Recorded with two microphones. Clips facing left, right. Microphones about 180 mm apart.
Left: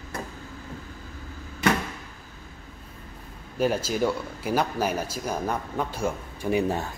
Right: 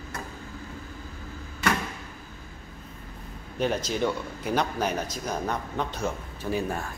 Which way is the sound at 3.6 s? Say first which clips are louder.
Left 2 dB; 5° left (ahead or behind).